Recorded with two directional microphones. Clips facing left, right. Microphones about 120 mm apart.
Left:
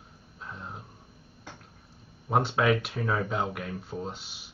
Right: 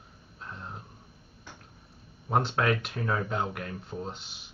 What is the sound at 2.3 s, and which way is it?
Speech, 5° left (ahead or behind).